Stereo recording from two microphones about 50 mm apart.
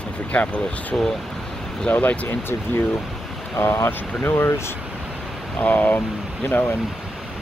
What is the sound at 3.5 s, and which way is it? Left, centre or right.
Speech, left.